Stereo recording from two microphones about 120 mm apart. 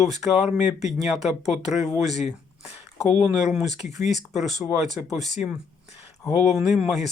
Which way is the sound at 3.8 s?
70° left (ahead or behind).